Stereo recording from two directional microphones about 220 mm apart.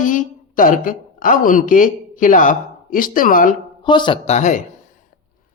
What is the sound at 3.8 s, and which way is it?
Speech, 20° left (ahead or behind).